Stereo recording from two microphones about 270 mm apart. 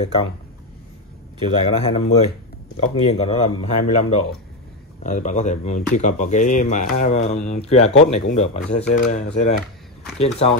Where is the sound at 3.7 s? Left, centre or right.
Left.